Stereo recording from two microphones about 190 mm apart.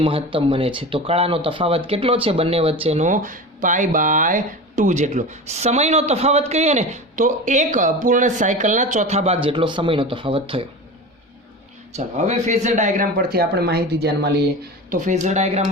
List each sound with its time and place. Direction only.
0.0 s speech: 25° right (ahead or behind)
11.9 s speech: 35° right (ahead or behind); by 14.3 s 60° right (ahead or behind)
14.8 s speech: 40° right (ahead or behind)